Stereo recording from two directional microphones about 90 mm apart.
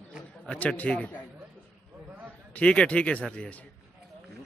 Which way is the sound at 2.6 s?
15° left (ahead or behind).